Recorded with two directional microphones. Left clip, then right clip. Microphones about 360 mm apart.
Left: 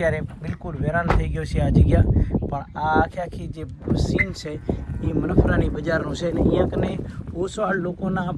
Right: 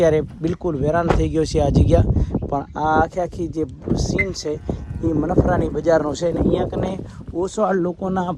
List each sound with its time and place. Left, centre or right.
0.4 s speech: centre